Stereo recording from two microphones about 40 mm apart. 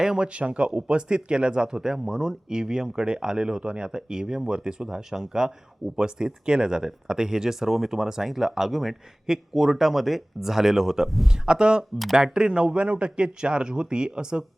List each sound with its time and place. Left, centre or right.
0.0 s speech: centre
0.3 s speech: right
1.7 s speech: centre
11.3 s speech: right